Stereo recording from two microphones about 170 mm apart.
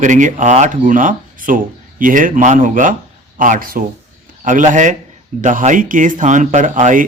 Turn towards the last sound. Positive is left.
turn(degrees=-50)  # may be behind; listen again after turning